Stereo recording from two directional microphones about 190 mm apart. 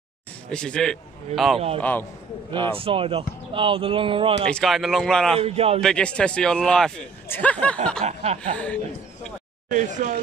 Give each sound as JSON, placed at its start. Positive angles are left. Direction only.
{"t": 0.5, "sound": "a man's voice", "side_deg": 5}
{"t": 2.7, "sound": "speech", "side_deg": -30}
{"t": 4.5, "sound": "a man's voice", "side_deg": 5}
{"t": 5.4, "sound": "chuckle", "side_deg": -35}
{"t": 5.8, "sound": "a man's voice", "side_deg": 5}
{"t": 8.0, "sound": "chuckle", "side_deg": -35}
{"t": 8.4, "sound": "a man's voice", "side_deg": 5}
{"t": 9.7, "sound": "speech", "side_deg": -40}